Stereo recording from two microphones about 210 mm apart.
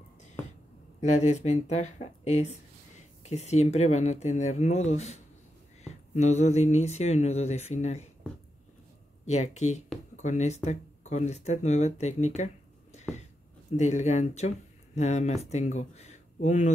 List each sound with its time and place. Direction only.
1.0 s speech: 35° left (ahead or behind)
9.2 s speech: 35° left (ahead or behind)
13.7 s speech: 35° left (ahead or behind)